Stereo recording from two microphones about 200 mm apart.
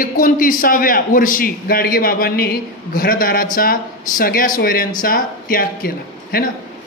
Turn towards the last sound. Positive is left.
turn(degrees=50)  # may be behind; listen again after turning